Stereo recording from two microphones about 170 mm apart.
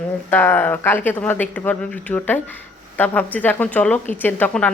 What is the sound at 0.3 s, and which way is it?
Speech, 10° left (ahead or behind).